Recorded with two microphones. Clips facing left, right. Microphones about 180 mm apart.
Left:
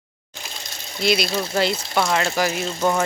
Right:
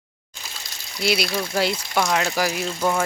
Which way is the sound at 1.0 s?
10° right (ahead or behind).